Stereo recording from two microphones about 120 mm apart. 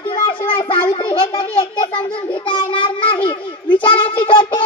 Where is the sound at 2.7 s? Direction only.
45° left (ahead or behind).